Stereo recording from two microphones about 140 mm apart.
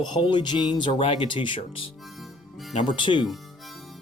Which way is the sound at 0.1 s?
35° left (ahead or behind).